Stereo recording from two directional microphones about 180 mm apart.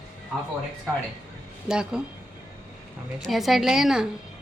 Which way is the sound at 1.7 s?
5° right (ahead or behind).